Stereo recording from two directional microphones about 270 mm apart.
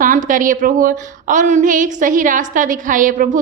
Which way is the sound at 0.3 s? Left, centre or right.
Right.